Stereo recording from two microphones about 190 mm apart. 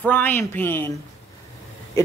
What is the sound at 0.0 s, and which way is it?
Speech, 10° left (ahead or behind).